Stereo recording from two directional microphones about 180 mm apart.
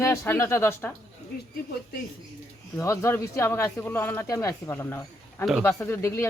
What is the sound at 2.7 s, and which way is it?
Speech, 15° left (ahead or behind).